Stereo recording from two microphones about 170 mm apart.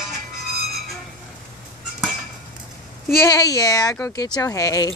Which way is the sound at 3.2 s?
20° left (ahead or behind).